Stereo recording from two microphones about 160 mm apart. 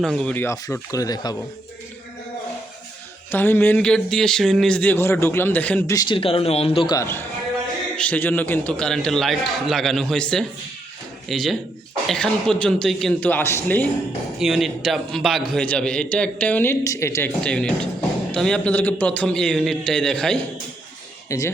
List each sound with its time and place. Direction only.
0.0 s a man's voice: 5° left (ahead or behind)
0.4 s speech: 20° left (ahead or behind)
3.3 s a man's voice: 15° left (ahead or behind)
5.9 s speech: 25° left (ahead or behind)
6.9 s a man's voice: 15° left (ahead or behind)
14.3 s a man's voice: centre (ahead or behind)
21.2 s speech: 20° left (ahead or behind)